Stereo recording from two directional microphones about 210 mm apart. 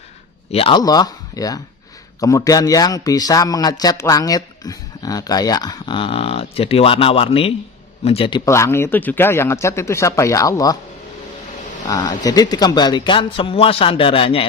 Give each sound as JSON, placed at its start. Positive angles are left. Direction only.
{"t": 0.5, "sound": "a man's voice", "side_deg": 25}
{"t": 8.4, "sound": "speech", "side_deg": 15}
{"t": 11.9, "sound": "a man's voice", "side_deg": 20}